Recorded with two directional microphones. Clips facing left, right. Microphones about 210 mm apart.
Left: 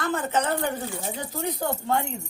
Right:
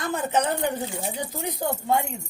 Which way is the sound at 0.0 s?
15° right (ahead or behind).